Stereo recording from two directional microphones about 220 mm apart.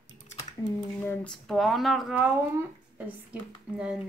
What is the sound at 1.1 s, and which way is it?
A woman's voice, 5° left (ahead or behind).